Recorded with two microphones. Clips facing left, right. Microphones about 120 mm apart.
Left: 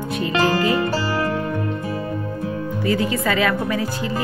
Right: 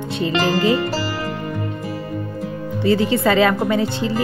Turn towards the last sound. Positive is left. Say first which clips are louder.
# right 4 dB
turn(degrees=-30)  # may be behind; listen again after turning